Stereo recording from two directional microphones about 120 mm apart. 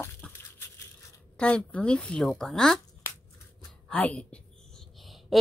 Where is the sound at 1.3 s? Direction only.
10° left (ahead or behind).